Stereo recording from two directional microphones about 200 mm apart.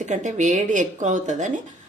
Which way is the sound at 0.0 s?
35° right (ahead or behind).